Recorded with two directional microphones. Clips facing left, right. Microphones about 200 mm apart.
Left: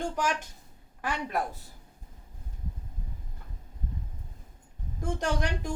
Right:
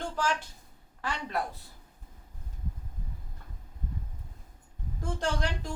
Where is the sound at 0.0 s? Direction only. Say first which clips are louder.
Left 1 dB; 15° left (ahead or behind).